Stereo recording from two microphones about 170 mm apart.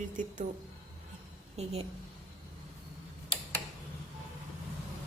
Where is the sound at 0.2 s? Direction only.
50° right (ahead or behind).